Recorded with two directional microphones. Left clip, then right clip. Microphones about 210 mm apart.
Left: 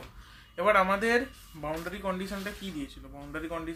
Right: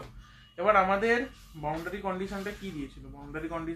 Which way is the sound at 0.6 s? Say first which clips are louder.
Even; 40° left (ahead or behind).